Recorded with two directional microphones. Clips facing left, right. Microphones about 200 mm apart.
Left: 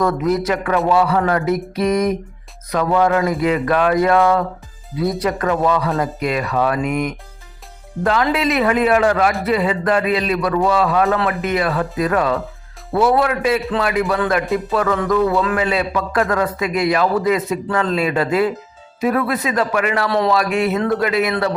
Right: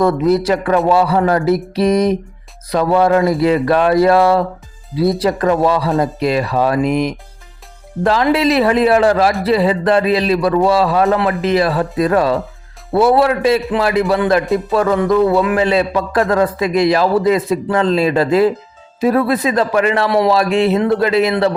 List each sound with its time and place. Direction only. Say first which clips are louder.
0.0 s a man's voice: right 4 dB; 30° right (ahead or behind)
20.1 s a man's voice: right 4 dB; 15° right (ahead or behind)
20.3 s a man's voice: right 4 dB; 30° right (ahead or behind)